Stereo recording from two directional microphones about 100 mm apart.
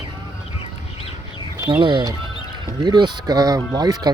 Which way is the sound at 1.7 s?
55° right (ahead or behind).